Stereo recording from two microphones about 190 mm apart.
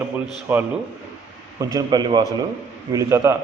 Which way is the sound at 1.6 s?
20° right (ahead or behind).